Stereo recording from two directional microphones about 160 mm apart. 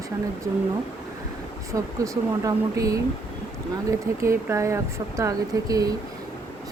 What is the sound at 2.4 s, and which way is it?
Speech, 20° right (ahead or behind).